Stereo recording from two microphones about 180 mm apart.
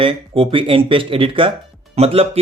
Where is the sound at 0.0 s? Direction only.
30° right (ahead or behind).